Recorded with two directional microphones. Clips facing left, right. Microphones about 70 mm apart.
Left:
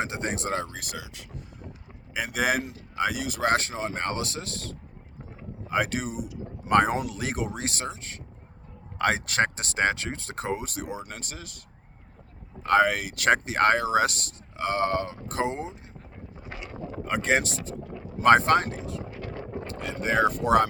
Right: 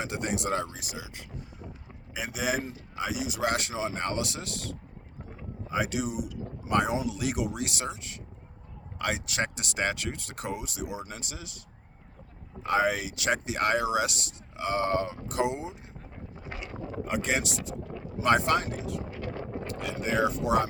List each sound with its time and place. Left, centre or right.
0.0 s vehicle: left
0.7 s speech: left
2.1 s speech: left
7.2 s speech: left
12.6 s speech: left
17.1 s speech: left
19.8 s speech: left
20.1 s speech: left